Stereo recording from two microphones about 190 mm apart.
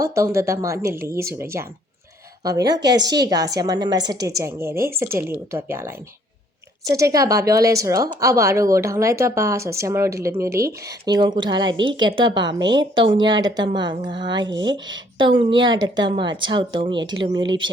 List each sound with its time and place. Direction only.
0.0 s a woman's voice: 15° right (ahead or behind)